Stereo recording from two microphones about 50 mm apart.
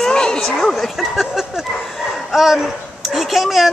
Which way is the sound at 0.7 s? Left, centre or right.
Centre.